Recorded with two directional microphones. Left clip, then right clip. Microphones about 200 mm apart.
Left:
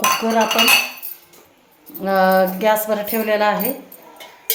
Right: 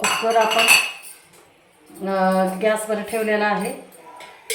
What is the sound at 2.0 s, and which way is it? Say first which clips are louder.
Speech: left 5 dB; 60° left (ahead or behind).